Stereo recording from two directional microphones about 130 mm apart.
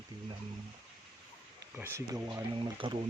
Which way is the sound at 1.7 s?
15° right (ahead or behind).